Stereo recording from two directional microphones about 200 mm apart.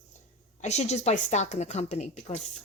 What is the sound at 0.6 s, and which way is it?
Speech, 35° left (ahead or behind).